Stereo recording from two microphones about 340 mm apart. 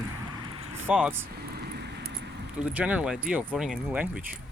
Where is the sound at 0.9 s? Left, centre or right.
Centre.